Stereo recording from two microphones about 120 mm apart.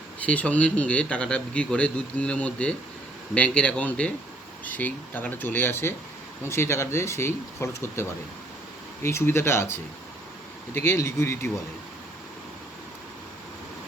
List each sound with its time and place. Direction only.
0.3 s speech: 10° left (ahead or behind)
10.8 s speech: 20° left (ahead or behind)